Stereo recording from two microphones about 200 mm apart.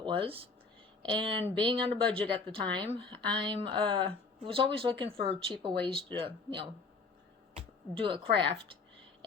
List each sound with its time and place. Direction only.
0.0 s speech: 25° right (ahead or behind)